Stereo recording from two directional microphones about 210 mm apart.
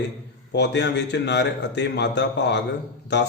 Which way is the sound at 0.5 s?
55° left (ahead or behind).